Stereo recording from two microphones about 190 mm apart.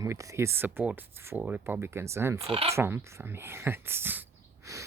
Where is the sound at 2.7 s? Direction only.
15° right (ahead or behind).